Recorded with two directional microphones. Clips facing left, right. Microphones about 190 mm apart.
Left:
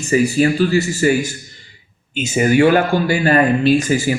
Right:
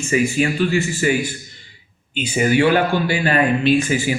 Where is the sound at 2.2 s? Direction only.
45° left (ahead or behind).